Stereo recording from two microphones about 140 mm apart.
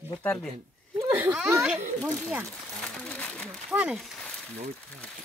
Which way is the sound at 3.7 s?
5° right (ahead or behind).